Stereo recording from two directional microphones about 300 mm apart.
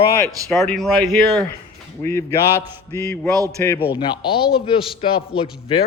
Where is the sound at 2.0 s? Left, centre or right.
Centre.